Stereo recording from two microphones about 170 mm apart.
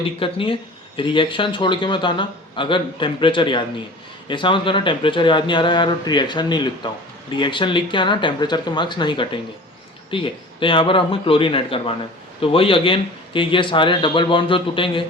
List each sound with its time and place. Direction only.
0.2 s speech: 30° left (ahead or behind)